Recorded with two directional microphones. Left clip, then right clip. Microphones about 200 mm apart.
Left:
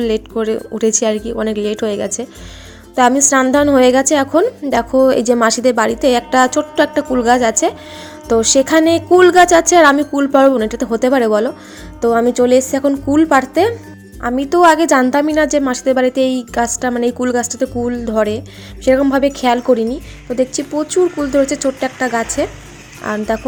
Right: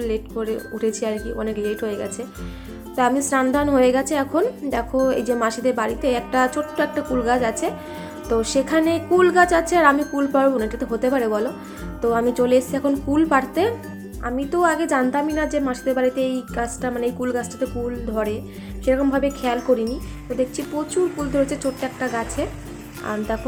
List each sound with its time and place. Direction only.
0.0 s a woman's voice: 45° left (ahead or behind)
14.2 s a woman's voice: 45° left (ahead or behind)